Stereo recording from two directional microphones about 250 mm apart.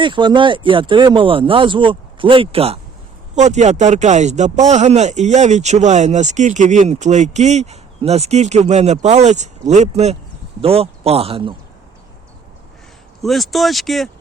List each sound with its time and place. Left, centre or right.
0.0 s speech: centre
13.2 s speech: centre